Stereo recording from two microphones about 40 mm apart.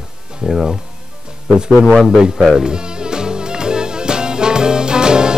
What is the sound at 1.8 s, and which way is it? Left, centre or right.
Speech, centre.